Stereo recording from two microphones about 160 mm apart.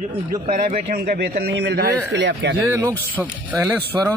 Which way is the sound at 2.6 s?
15° right (ahead or behind).